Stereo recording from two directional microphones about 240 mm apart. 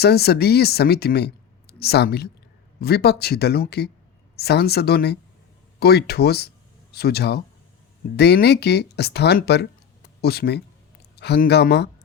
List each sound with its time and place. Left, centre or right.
0.0 s a woman's voice: left